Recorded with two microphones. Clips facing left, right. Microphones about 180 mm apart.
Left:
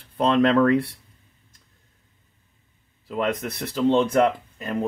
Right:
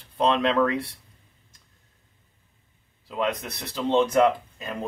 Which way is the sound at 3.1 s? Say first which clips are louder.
Left 2 dB; 50° left (ahead or behind).